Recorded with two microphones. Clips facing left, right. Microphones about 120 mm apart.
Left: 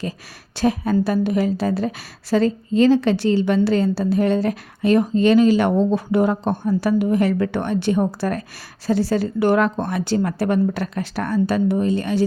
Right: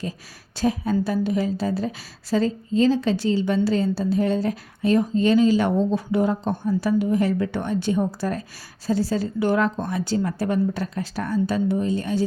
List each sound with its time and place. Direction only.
0.5 s a woman's voice: 70° left (ahead or behind)